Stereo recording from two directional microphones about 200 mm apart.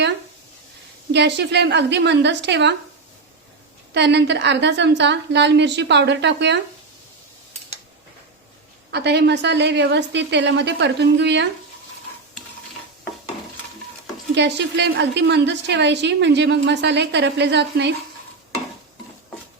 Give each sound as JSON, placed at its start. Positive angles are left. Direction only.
{"t": 1.1, "sound": "a woman's voice", "side_deg": -60}
{"t": 3.9, "sound": "a woman's voice", "side_deg": -60}
{"t": 8.9, "sound": "a woman's voice", "side_deg": -55}
{"t": 14.3, "sound": "a woman's voice", "side_deg": -60}